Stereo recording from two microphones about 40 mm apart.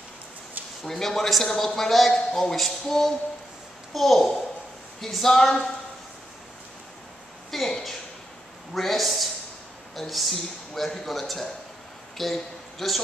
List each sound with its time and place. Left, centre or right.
0.8 s a man's voice: centre
2.1 s speech: centre
2.5 s a man's voice: centre
7.5 s a sound: centre
8.7 s a man's voice: centre